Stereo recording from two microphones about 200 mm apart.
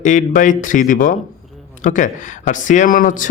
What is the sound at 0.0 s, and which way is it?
A man's voice, 40° left (ahead or behind).